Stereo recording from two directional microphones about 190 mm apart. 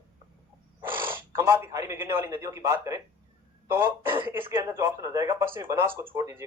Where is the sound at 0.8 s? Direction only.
10° right (ahead or behind).